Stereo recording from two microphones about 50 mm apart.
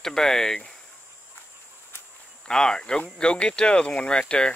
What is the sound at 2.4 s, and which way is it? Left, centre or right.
Speech, centre.